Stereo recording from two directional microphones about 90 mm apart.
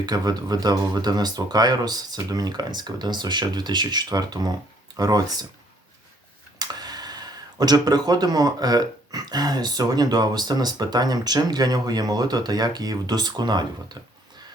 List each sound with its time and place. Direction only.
0.0 s speech: 50° right (ahead or behind)
6.6 s speech: 45° right (ahead or behind)